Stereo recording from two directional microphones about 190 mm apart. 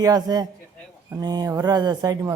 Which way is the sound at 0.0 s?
20° right (ahead or behind).